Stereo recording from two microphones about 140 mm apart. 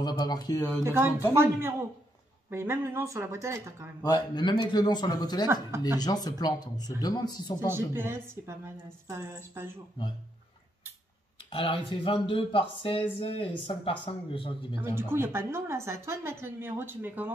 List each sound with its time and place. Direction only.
0.0 s speech: 30° left (ahead or behind)
0.8 s a woman's voice: 15° right (ahead or behind)
2.5 s speech: 20° right (ahead or behind)
4.0 s speech: 30° left (ahead or behind)
7.6 s a woman's voice: 15° right (ahead or behind)
11.5 s speech: 40° left (ahead or behind)
14.8 s a woman's voice: 15° right (ahead or behind)